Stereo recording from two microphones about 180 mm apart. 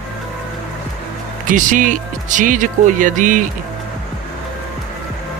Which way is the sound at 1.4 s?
45° right (ahead or behind).